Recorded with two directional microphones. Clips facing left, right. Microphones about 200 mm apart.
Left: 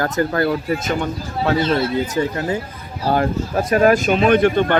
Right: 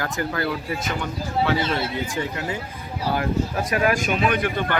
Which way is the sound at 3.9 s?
30° left (ahead or behind).